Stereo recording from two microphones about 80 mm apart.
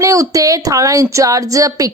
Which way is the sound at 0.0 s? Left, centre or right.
Right.